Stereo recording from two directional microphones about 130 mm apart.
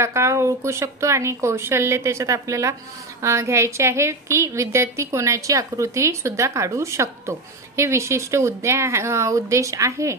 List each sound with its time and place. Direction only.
0.0 s a woman's voice: 20° right (ahead or behind)